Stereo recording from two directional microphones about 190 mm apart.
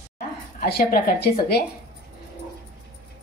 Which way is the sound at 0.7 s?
55° left (ahead or behind).